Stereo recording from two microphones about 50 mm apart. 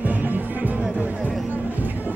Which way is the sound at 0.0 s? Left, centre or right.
Right.